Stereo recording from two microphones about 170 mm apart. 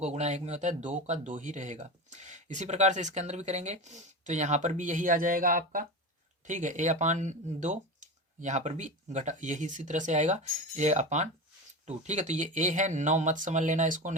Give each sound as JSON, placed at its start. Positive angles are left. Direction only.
{"t": 0.0, "sound": "speech", "side_deg": -40}